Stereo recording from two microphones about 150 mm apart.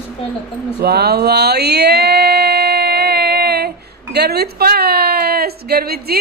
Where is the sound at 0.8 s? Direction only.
90° right.